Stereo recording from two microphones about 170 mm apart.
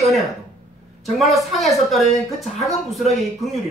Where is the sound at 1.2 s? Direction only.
Centre (ahead or behind).